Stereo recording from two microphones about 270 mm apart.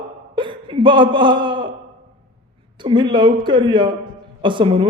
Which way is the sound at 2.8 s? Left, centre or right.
Centre.